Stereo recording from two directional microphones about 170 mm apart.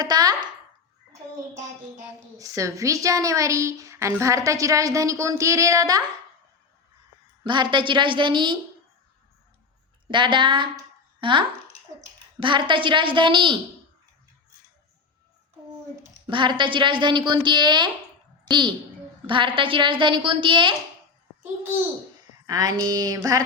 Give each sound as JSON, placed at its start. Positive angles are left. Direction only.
{"t": 0.0, "sound": "a sound", "side_deg": -25}
{"t": 2.4, "sound": "a woman's voice", "side_deg": -20}
{"t": 7.4, "sound": "a woman's voice", "side_deg": -25}
{"t": 10.1, "sound": "a woman's voice", "side_deg": -30}
{"t": 16.2, "sound": "a woman's voice", "side_deg": -25}
{"t": 19.3, "sound": "a woman's voice", "side_deg": -30}
{"t": 22.4, "sound": "a woman's voice", "side_deg": -20}